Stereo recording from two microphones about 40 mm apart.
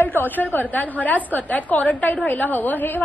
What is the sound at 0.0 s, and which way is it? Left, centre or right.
A woman's voice, left.